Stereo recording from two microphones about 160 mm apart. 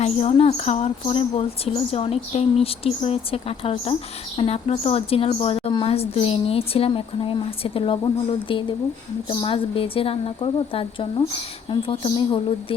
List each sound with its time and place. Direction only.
0.0 s a woman's voice: 40° left (ahead or behind)